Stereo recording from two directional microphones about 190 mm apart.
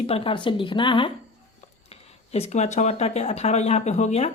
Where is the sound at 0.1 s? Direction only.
25° left (ahead or behind).